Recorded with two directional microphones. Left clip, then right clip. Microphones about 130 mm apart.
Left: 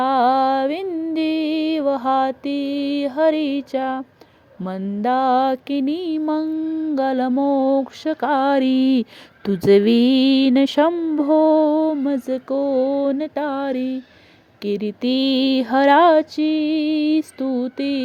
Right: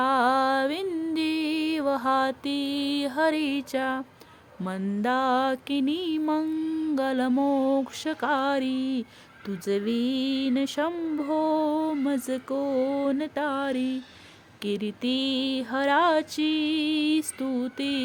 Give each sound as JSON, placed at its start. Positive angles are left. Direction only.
{"t": 0.0, "sound": "music", "side_deg": 30}
{"t": 7.4, "sound": "a sound", "side_deg": 30}
{"t": 11.2, "sound": "music", "side_deg": 40}